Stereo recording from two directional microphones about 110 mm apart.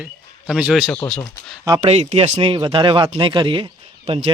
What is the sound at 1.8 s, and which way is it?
Speech, 75° right (ahead or behind).